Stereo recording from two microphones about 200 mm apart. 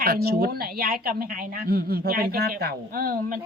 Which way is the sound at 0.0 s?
50° right (ahead or behind).